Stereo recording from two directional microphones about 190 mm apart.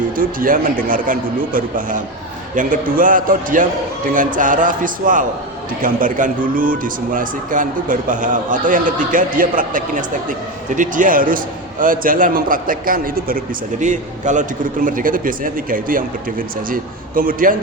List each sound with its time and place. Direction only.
0.2 s a man's voice: 45° right (ahead or behind)